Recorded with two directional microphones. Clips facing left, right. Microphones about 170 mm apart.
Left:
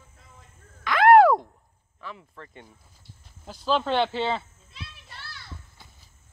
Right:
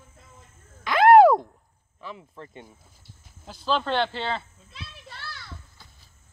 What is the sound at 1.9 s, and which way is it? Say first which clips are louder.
Speech: right 2 dB; 20° right (ahead or behind).